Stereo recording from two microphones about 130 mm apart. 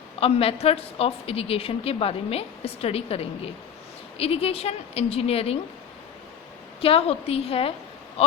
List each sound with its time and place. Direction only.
0.2 s a woman's voice: 50° left (ahead or behind)
6.8 s a woman's voice: 50° left (ahead or behind)